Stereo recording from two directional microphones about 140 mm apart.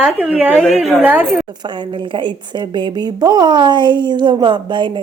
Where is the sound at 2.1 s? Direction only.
35° right (ahead or behind).